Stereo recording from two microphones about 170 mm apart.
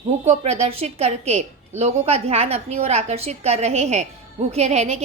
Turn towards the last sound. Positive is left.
turn(degrees=-40)  # may be behind; listen again after turning